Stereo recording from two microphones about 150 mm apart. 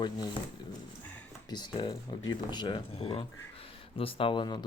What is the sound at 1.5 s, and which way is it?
Speech, 30° left (ahead or behind).